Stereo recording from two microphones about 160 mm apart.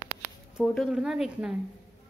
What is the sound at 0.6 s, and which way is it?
Speech, centre (ahead or behind).